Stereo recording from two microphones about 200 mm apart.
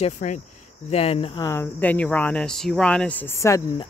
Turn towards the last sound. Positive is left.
turn(degrees=15)  # may be behind; listen again after turning